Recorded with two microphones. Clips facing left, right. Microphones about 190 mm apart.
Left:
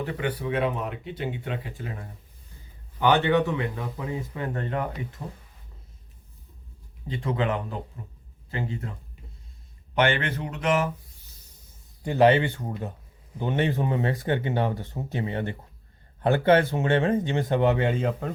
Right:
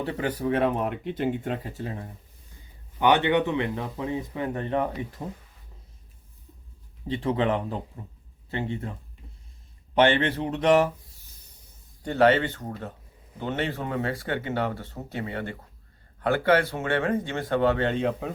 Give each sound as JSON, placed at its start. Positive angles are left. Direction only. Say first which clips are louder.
{"t": 0.0, "sound": "speech", "louder": "right 2 dB", "side_deg": -35}
{"t": 3.0, "sound": "speech", "louder": "even", "side_deg": -15}
{"t": 7.1, "sound": "speech", "louder": "right 2 dB", "side_deg": -30}
{"t": 10.0, "sound": "speech", "louder": "right 3 dB", "side_deg": -30}
{"t": 12.0, "sound": "speech", "louder": "left 1 dB", "side_deg": 15}